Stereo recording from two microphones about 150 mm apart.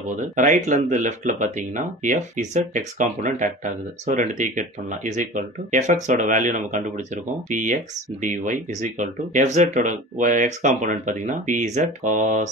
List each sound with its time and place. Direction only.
0.4 s speech: 55° right (ahead or behind)